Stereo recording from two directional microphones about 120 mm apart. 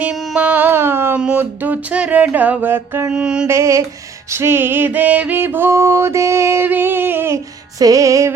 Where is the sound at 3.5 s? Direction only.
25° right (ahead or behind).